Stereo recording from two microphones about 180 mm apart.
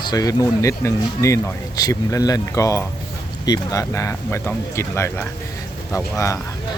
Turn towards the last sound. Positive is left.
turn(degrees=15)  # may be behind; listen again after turning